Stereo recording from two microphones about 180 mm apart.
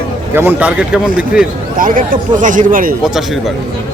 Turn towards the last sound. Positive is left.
turn(degrees=-50)  # may be behind; listen again after turning